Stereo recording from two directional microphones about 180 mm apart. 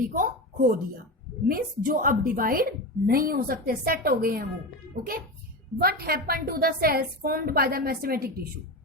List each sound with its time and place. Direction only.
0.0 s a woman's voice: 50° right (ahead or behind)